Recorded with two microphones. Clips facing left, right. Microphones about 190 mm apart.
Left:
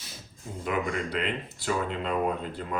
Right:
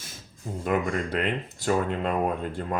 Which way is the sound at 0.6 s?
45° right (ahead or behind).